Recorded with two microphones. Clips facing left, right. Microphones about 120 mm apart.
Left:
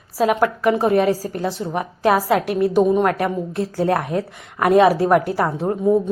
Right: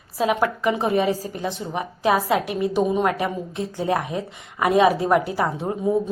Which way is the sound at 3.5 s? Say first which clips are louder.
Left 4 dB; 65° left (ahead or behind).